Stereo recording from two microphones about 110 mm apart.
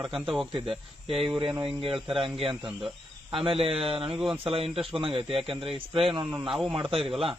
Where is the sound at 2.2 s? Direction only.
55° right (ahead or behind).